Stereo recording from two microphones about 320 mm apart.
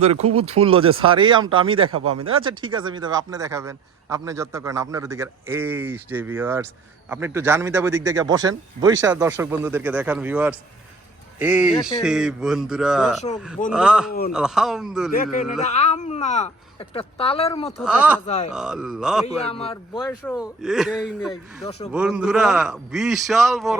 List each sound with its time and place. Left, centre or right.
0.0 s a man's voice: centre
1.9 s speech: right
2.4 s a man's voice: centre
11.7 s speech: centre
12.0 s a man's voice: centre
15.1 s a man's voice: left
17.7 s a man's voice: centre
19.2 s speech: centre
20.1 s a man's voice: centre